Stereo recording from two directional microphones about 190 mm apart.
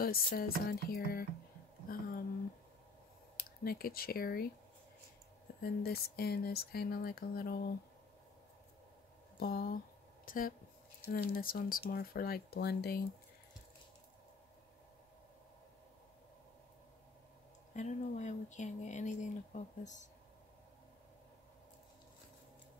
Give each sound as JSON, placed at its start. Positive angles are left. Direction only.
{"t": 0.0, "sound": "speech", "side_deg": 50}
{"t": 3.3, "sound": "speech", "side_deg": 50}
{"t": 5.6, "sound": "speech", "side_deg": 55}
{"t": 9.4, "sound": "speech", "side_deg": 55}
{"t": 17.7, "sound": "speech", "side_deg": 40}